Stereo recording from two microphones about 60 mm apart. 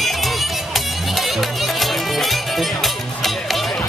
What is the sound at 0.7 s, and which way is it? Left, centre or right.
Music, centre.